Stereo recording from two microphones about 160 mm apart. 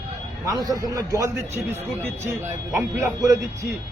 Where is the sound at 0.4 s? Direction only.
20° right (ahead or behind).